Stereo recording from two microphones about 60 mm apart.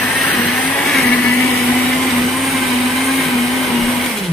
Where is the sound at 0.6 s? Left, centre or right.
Left.